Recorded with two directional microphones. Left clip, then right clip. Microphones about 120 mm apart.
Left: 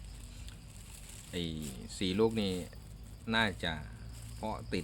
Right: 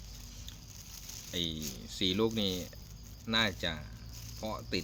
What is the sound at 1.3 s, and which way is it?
Speech, 5° left (ahead or behind).